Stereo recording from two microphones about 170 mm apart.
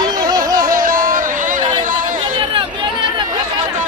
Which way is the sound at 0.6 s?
55° right (ahead or behind).